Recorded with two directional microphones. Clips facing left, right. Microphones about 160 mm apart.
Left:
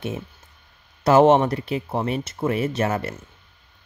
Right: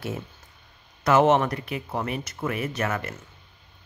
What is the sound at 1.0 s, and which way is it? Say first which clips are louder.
Speech: left 4 dB; 30° left (ahead or behind).